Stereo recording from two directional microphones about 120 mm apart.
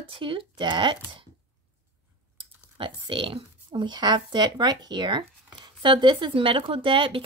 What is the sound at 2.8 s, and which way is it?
Speech, 45° right (ahead or behind).